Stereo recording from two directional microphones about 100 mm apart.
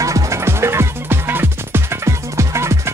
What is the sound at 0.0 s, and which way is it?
Music, 35° right (ahead or behind).